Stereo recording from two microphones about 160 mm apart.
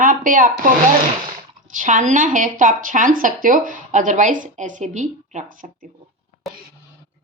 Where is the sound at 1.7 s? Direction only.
55° right (ahead or behind).